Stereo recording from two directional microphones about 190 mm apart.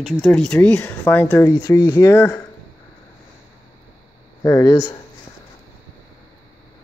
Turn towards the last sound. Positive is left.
turn(degrees=15)  # may be behind; listen again after turning